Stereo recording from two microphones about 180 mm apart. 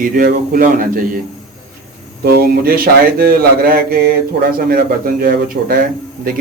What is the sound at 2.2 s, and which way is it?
A man's voice, 60° right (ahead or behind).